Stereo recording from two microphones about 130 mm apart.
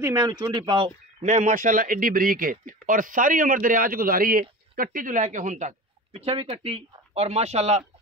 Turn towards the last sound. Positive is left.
turn(degrees=-55)  # may be behind; listen again after turning